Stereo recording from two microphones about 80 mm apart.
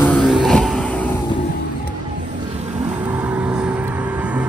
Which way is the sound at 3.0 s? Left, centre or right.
Centre.